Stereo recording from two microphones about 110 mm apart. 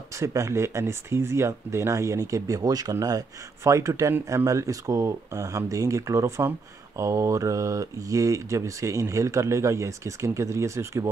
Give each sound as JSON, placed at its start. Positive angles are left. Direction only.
{"t": 0.2, "sound": "speech", "side_deg": -30}